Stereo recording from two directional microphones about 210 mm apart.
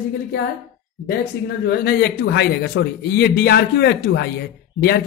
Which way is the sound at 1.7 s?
50° left (ahead or behind).